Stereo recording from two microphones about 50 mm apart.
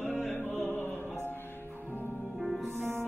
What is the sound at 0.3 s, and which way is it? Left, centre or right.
Opera, left.